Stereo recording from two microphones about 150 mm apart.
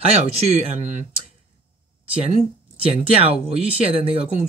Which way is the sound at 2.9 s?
40° right (ahead or behind).